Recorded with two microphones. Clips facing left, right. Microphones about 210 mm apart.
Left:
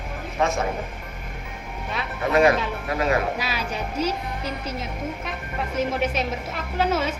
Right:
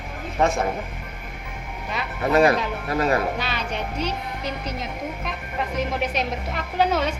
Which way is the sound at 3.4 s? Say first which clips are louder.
Even; 5° left (ahead or behind).